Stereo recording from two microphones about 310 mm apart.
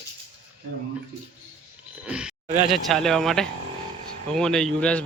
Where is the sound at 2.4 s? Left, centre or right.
Right.